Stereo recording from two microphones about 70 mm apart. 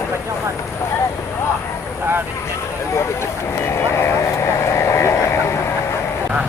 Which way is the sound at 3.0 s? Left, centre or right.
Left.